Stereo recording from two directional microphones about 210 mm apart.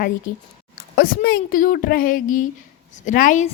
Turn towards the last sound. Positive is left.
turn(degrees=35)  # may be behind; listen again after turning